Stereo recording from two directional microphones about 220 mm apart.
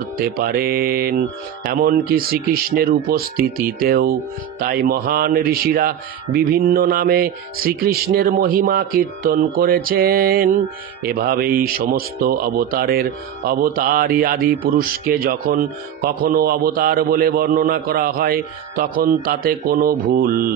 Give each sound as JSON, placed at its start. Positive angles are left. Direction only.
{"t": 0.4, "sound": "speech", "side_deg": -40}